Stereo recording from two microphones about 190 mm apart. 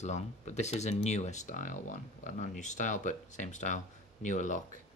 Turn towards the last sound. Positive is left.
turn(degrees=40)  # may be behind; listen again after turning